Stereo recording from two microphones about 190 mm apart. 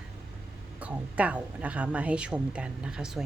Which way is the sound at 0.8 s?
5° right (ahead or behind).